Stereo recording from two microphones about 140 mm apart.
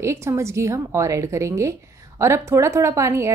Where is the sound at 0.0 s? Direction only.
20° right (ahead or behind).